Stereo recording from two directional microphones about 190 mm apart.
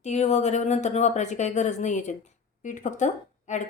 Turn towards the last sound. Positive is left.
turn(degrees=40)  # may be behind; listen again after turning